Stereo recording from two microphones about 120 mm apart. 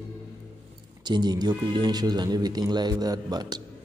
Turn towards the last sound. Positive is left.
turn(degrees=-35)  # may be behind; listen again after turning